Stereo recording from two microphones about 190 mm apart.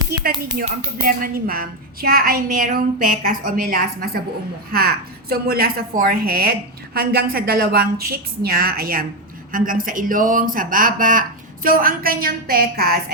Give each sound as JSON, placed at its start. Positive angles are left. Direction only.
{"t": 0.1, "sound": "a woman's voice", "side_deg": -55}